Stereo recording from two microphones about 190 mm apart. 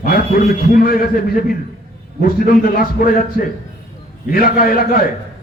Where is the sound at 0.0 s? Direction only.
50° left (ahead or behind).